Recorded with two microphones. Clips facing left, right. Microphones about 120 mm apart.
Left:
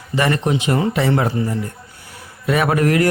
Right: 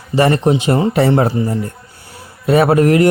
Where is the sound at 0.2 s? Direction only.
35° right (ahead or behind).